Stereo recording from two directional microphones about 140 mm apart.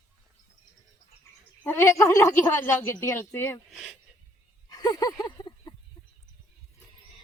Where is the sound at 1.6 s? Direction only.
20° left (ahead or behind).